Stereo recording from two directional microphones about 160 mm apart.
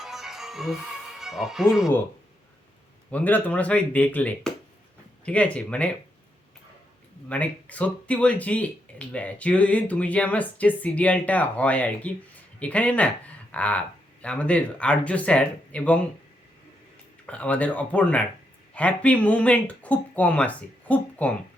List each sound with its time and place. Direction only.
0.0 s music: centre (ahead or behind)
1.2 s speech: 5° right (ahead or behind)
3.1 s speech: 10° left (ahead or behind)
7.3 s speech: 10° left (ahead or behind)
17.2 s speech: 10° left (ahead or behind)